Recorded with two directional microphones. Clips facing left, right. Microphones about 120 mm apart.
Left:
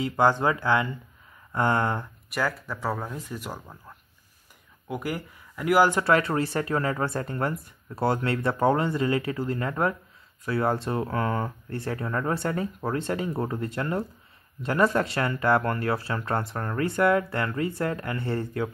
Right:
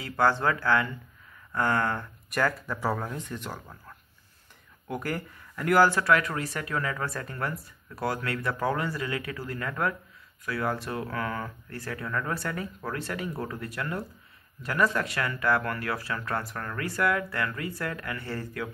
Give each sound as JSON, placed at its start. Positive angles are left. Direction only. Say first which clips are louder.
{"t": 0.0, "sound": "speech", "louder": "left 3 dB", "side_deg": 20}
{"t": 2.2, "sound": "speech", "louder": "right 2 dB", "side_deg": 5}